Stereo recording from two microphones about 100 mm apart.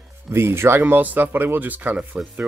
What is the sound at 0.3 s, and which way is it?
Speech, 25° right (ahead or behind).